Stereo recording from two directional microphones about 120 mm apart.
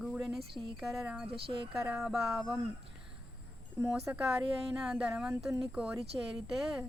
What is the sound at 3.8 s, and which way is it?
Speech, 25° right (ahead or behind).